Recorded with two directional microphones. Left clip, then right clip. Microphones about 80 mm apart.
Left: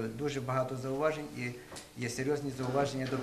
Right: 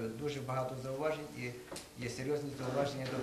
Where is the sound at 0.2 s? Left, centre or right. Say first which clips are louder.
Left 6 dB; left.